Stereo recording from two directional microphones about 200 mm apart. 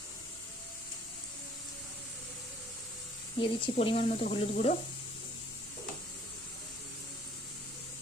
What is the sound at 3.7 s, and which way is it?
Speech, 30° left (ahead or behind).